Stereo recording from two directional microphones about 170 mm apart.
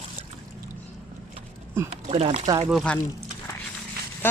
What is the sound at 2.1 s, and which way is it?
Speech, 35° right (ahead or behind).